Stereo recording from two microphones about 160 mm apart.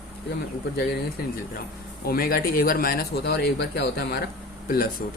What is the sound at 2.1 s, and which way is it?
Speech, 70° left (ahead or behind).